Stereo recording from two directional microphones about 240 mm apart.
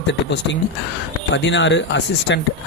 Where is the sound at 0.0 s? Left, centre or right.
Left.